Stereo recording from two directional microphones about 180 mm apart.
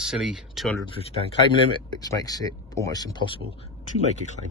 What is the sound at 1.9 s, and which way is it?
Speech, 20° left (ahead or behind).